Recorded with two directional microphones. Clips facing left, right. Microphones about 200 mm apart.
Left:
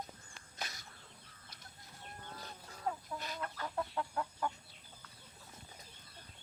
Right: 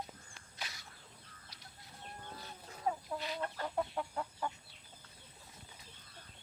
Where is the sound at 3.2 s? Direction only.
45° left (ahead or behind).